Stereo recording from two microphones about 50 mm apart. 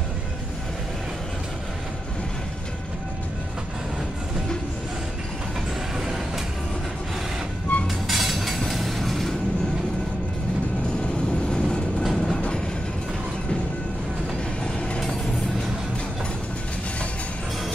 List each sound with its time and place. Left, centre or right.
5.9 s vehicle: centre
7.7 s music: left
8.1 s train: centre
12.0 s train: centre
12.4 s train: left